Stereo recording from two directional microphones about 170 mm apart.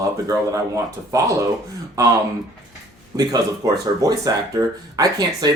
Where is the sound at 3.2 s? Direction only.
20° right (ahead or behind).